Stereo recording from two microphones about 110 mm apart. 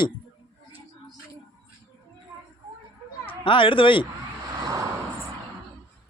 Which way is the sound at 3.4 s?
50° left (ahead or behind).